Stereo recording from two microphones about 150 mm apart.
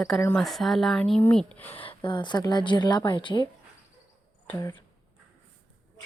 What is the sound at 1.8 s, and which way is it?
A woman's voice, 35° left (ahead or behind).